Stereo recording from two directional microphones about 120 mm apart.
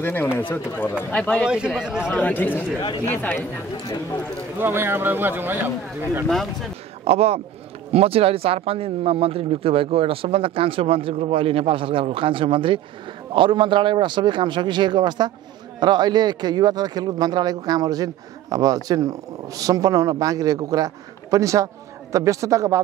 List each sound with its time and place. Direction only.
0.0 s speech: 15° left (ahead or behind)
1.8 s speech: 5° right (ahead or behind)
2.0 s speech: 15° left (ahead or behind)
4.6 s speech: 20° right (ahead or behind)
6.2 s speech: 5° left (ahead or behind)
7.1 s a man's voice: 60° right (ahead or behind); by 22.8 s 25° right (ahead or behind)